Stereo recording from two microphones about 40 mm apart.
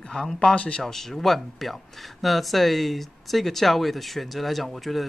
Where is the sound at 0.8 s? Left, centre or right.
Centre.